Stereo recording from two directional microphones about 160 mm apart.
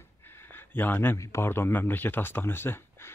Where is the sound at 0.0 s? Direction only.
15° left (ahead or behind).